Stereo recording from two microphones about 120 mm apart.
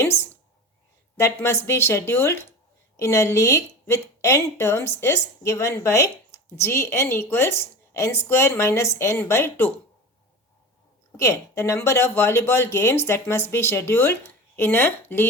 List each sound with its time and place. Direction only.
0.0 s a sound: 20° left (ahead or behind)
1.1 s a woman's voice: 20° left (ahead or behind)
11.2 s a woman's voice: 25° left (ahead or behind)